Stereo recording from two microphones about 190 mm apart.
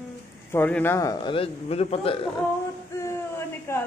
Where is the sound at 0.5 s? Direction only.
10° left (ahead or behind); by 2.3 s 30° left (ahead or behind).